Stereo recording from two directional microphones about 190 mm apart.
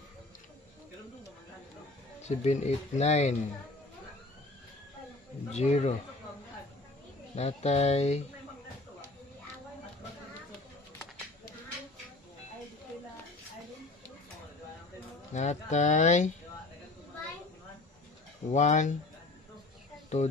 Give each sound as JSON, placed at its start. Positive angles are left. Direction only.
{"t": 2.2, "sound": "speech", "side_deg": 35}
{"t": 5.5, "sound": "speech", "side_deg": 35}
{"t": 7.3, "sound": "speech", "side_deg": 35}
{"t": 15.3, "sound": "speech", "side_deg": 40}
{"t": 18.5, "sound": "speech", "side_deg": 40}
{"t": 20.1, "sound": "speech", "side_deg": 35}